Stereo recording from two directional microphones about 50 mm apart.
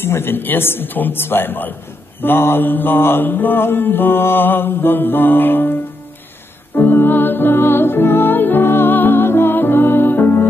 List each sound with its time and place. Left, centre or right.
0.0 s mantra: left
6.7 s music: left